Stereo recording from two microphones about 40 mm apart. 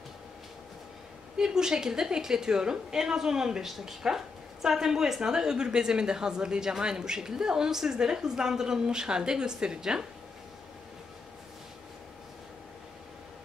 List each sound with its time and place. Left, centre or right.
1.4 s a woman's voice: centre